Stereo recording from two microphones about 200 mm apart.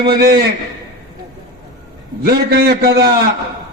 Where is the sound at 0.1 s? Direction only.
55° right (ahead or behind).